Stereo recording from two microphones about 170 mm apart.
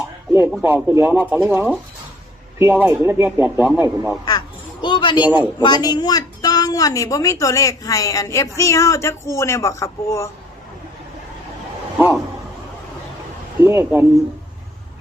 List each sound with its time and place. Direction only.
0.6 s speech: 15° right (ahead or behind)
4.3 s a sound: 25° left (ahead or behind)
5.5 s a woman's voice: 25° left (ahead or behind)
11.9 s speech: 10° right (ahead or behind)
13.6 s speech: 15° right (ahead or behind)